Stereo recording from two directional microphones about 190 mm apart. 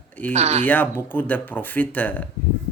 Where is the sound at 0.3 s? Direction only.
35° right (ahead or behind).